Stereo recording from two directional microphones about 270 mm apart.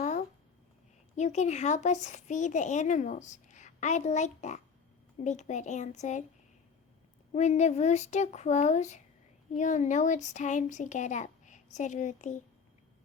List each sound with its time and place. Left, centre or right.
0.0 s a sound: left
1.1 s speech: left
7.3 s speech: left